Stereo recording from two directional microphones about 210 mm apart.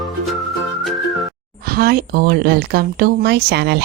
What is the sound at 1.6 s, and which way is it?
Speech, 45° right (ahead or behind).